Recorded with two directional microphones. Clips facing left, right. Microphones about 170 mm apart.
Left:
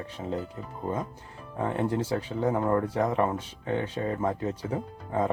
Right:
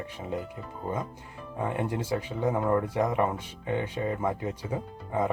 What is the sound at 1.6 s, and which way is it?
Speech, 15° right (ahead or behind).